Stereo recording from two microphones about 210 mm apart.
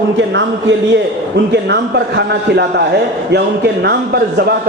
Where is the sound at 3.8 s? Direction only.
50° right (ahead or behind).